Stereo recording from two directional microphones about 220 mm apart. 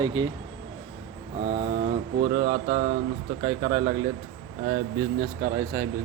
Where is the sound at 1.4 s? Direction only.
40° right (ahead or behind).